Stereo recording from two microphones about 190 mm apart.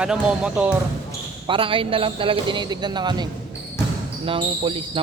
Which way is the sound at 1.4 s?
25° right (ahead or behind).